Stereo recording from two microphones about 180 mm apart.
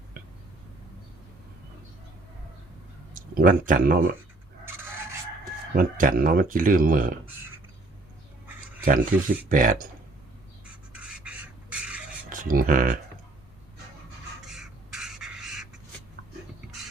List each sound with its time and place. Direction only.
3.2 s speech: 50° right (ahead or behind)
5.7 s speech: 50° right (ahead or behind)
8.8 s speech: 50° right (ahead or behind)
10.9 s a sound: 5° right (ahead or behind)
12.3 s speech: 50° right (ahead or behind)
14.4 s crow: 5° right (ahead or behind)